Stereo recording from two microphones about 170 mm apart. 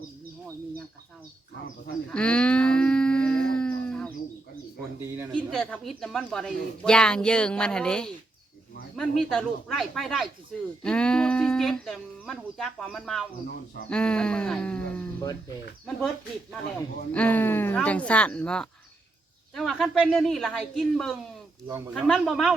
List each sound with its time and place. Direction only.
2.0 s livestock: 5° left (ahead or behind)
5.3 s speech: 5° left (ahead or behind)
21.7 s speech: 15° right (ahead or behind)
21.9 s speech: centre (ahead or behind)